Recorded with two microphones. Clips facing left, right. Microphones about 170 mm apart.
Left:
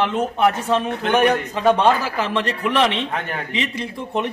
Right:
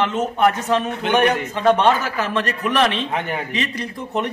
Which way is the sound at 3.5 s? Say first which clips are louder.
Even; 20° left (ahead or behind).